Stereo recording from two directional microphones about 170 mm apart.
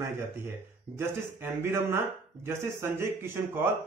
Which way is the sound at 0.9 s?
15° right (ahead or behind).